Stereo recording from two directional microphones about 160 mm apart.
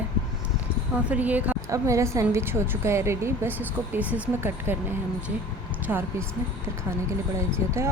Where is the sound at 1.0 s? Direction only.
10° right (ahead or behind).